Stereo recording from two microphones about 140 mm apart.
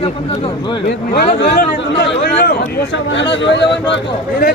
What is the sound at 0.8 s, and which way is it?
Speech, 90° left.